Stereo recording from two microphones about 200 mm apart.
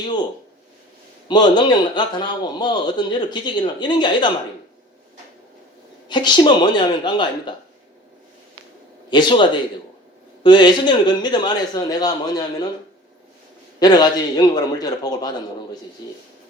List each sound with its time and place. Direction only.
1.3 s a man's voice: 20° left (ahead or behind)
6.1 s a man's voice: 20° left (ahead or behind)
9.0 s a man's voice: 25° left (ahead or behind)
13.7 s a man's voice: 20° left (ahead or behind)